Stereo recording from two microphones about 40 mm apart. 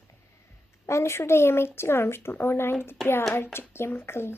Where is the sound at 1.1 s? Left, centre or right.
Left.